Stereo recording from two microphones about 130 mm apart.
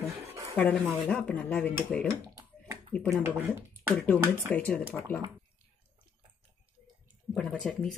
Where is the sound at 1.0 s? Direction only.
10° left (ahead or behind).